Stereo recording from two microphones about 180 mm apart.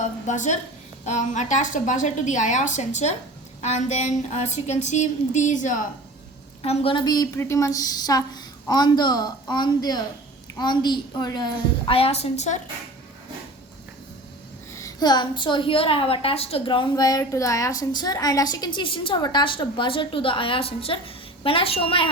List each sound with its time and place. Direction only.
0.3 s a woman's voice: 40° left (ahead or behind)
6.6 s a woman's voice: 30° left (ahead or behind)
14.7 s a woman's voice: 15° left (ahead or behind)